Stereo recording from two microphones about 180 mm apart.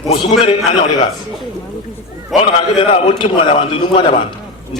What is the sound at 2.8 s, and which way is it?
A man's voice, 35° left (ahead or behind).